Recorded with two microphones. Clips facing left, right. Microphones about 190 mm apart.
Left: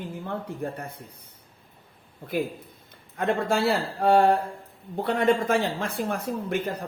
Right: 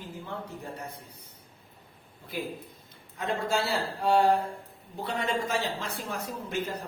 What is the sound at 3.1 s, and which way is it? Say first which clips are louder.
A man's voice: left 5 dB; 55° left (ahead or behind).